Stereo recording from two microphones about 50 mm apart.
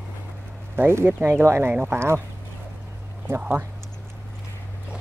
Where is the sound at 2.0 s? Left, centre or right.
Right.